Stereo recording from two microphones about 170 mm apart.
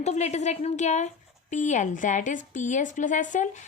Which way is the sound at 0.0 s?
40° left (ahead or behind).